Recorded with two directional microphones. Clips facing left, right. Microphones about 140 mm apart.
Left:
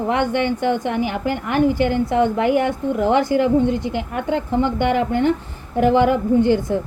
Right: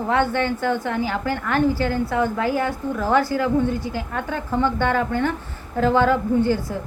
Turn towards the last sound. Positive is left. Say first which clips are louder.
# left 3 dB
turn(degrees=20)  # may be behind; listen again after turning